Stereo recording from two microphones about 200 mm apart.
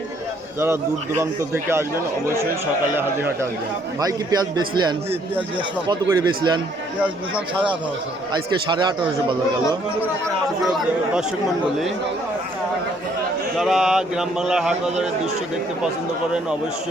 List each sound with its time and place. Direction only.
1.2 s a man's voice: 15° right (ahead or behind)
4.0 s a man's voice: 20° right (ahead or behind)
7.0 s a man's voice: 5° right (ahead or behind)
8.3 s a man's voice: 20° right (ahead or behind)
13.6 s speech: centre (ahead or behind)